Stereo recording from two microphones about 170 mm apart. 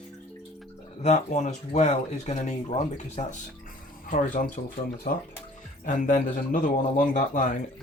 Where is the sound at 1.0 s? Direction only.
45° left (ahead or behind).